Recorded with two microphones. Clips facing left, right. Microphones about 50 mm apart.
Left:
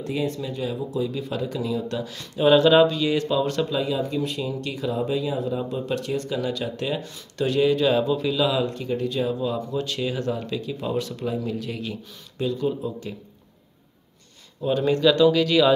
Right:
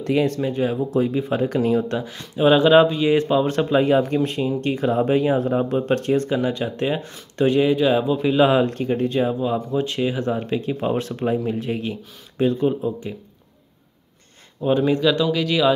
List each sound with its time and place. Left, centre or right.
0.0 s speech: right
0.4 s speech: right
1.1 s speech: right
1.4 s speech: right
7.7 s speech: centre
8.3 s speech: right
14.8 s speech: centre